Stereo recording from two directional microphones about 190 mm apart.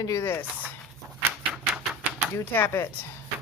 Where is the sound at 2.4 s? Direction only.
10° left (ahead or behind).